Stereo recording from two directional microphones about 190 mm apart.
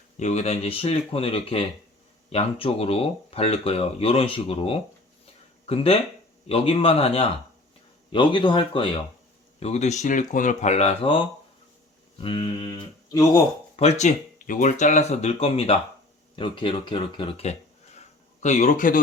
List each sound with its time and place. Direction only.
0.2 s speech: 35° left (ahead or behind)
5.2 s a sound: 30° left (ahead or behind)
6.5 s speech: 30° left (ahead or behind)
13.7 s speech: 35° left (ahead or behind)